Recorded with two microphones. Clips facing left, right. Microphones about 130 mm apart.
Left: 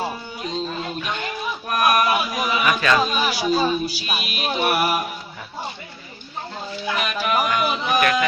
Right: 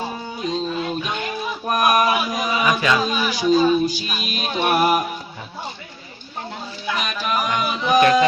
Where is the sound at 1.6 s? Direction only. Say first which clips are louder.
Right 2 dB; 20° right (ahead or behind).